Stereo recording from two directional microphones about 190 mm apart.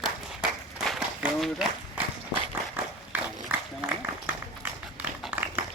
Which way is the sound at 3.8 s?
10° right (ahead or behind).